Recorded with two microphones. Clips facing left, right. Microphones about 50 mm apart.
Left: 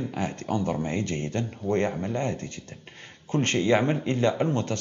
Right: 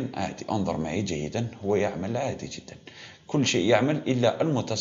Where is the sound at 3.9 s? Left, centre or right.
Left.